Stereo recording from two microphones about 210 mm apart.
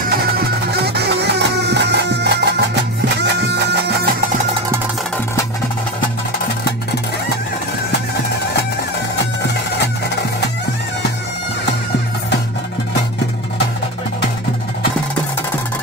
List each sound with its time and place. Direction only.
0.8 s music: 50° right (ahead or behind)